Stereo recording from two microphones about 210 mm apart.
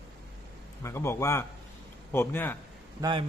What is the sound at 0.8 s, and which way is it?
Speech, 10° left (ahead or behind).